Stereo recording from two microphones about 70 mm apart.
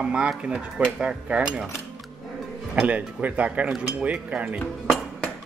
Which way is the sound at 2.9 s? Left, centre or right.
Right.